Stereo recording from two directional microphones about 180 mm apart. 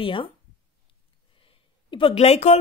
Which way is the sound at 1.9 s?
30° left (ahead or behind).